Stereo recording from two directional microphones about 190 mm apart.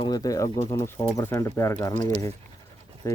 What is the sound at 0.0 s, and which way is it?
Speech, 20° left (ahead or behind).